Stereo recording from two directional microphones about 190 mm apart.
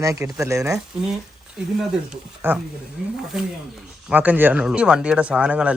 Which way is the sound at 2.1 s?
10° right (ahead or behind).